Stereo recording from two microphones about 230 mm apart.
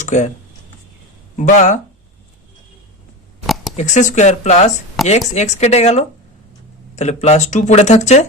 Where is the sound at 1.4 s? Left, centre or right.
Left.